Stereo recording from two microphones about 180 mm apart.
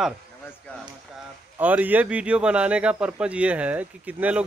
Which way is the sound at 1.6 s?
10° right (ahead or behind).